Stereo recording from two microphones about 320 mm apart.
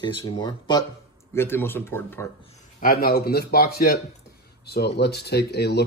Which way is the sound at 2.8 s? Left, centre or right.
Left.